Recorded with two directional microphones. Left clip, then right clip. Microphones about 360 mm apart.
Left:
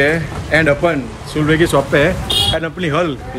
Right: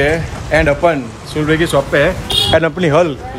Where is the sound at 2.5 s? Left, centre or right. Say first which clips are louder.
Right 6 dB; centre.